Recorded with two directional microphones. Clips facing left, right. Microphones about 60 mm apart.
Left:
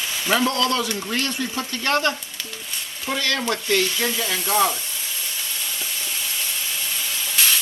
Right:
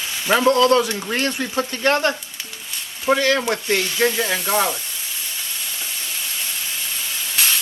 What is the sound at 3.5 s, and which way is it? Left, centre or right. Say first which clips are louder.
Speech: even; right.